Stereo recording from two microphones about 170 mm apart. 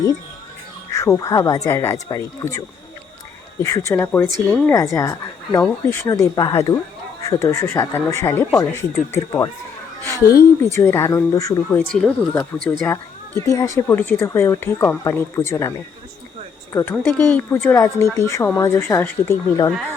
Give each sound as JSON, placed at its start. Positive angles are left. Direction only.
{"t": 0.9, "sound": "speech", "side_deg": 20}
{"t": 4.7, "sound": "speech", "side_deg": 20}
{"t": 10.0, "sound": "a sound", "side_deg": 15}
{"t": 10.3, "sound": "speech", "side_deg": 15}
{"t": 16.7, "sound": "speech", "side_deg": 15}